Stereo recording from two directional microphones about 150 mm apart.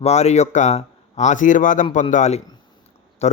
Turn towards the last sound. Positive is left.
turn(degrees=45)  # may be behind; listen again after turning